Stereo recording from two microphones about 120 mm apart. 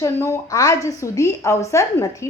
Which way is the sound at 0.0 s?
25° left (ahead or behind).